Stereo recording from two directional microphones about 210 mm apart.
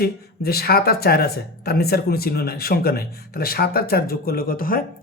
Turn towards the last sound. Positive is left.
turn(degrees=40)  # may be behind; listen again after turning